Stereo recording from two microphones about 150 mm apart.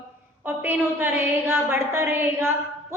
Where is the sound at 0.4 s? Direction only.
15° right (ahead or behind).